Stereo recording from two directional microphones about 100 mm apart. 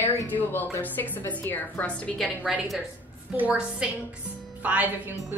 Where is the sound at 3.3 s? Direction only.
15° right (ahead or behind).